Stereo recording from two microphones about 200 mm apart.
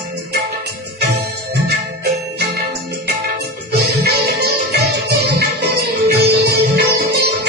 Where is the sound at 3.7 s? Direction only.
55° right (ahead or behind).